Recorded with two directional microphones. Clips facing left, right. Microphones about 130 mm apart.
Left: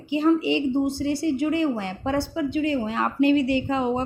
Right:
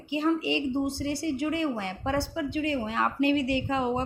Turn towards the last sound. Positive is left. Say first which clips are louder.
# left 4 dB
turn(degrees=30)  # may be behind; listen again after turning